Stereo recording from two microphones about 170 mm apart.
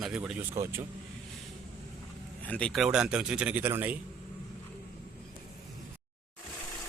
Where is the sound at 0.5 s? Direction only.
15° right (ahead or behind).